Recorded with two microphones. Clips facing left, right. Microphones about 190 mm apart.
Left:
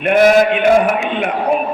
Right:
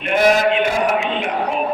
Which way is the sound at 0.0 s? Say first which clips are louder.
Left 5 dB; 55° left (ahead or behind).